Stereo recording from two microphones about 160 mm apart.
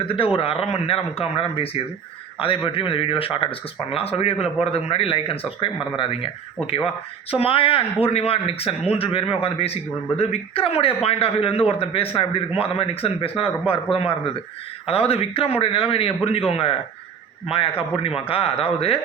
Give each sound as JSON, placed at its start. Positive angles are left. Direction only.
{"t": 0.3, "sound": "speech", "side_deg": 35}